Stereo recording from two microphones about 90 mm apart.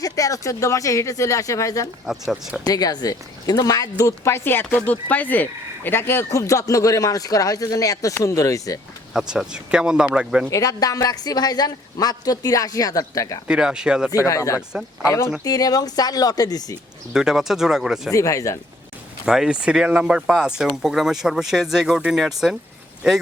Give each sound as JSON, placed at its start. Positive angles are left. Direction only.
{"t": 0.0, "sound": "speech", "side_deg": 40}
{"t": 2.0, "sound": "speech", "side_deg": -5}
{"t": 2.6, "sound": "speech", "side_deg": 45}
{"t": 3.9, "sound": "speech", "side_deg": 30}
{"t": 9.1, "sound": "speech", "side_deg": -5}
{"t": 10.5, "sound": "speech", "side_deg": 40}
{"t": 13.5, "sound": "speech", "side_deg": -10}
{"t": 14.3, "sound": "speech", "side_deg": 35}
{"t": 15.4, "sound": "speech", "side_deg": 45}
{"t": 17.2, "sound": "speech", "side_deg": -5}
{"t": 18.1, "sound": "speech", "side_deg": 35}
{"t": 19.2, "sound": "speech", "side_deg": -10}